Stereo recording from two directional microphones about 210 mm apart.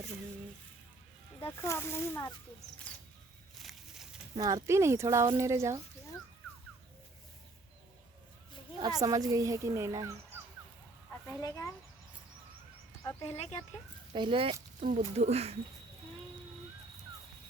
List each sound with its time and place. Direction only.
1.5 s speech: 10° left (ahead or behind)
3.6 s a sound: centre (ahead or behind)
4.4 s speech: 15° right (ahead or behind)
8.8 s speech: 15° right (ahead or behind)
11.3 s speech: 10° left (ahead or behind)
13.2 s speech: 30° left (ahead or behind)
14.1 s speech: 25° right (ahead or behind)